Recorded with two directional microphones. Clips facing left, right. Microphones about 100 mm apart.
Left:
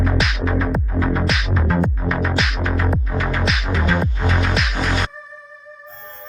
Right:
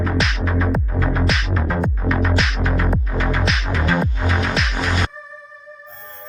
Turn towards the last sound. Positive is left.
turn(degrees=0)  # may be behind; listen again after turning